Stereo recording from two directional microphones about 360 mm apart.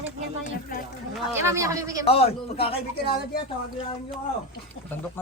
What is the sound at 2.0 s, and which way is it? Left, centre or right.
Speech, centre.